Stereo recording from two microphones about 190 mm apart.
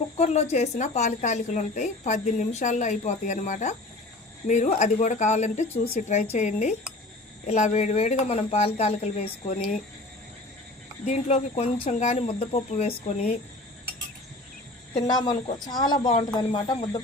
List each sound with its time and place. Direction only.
0.2 s a woman's voice: 35° left (ahead or behind)
11.0 s a woman's voice: 35° left (ahead or behind)
15.3 s speech: 25° left (ahead or behind)